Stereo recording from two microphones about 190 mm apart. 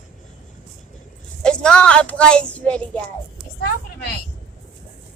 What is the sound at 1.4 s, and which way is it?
Speech, 5° left (ahead or behind).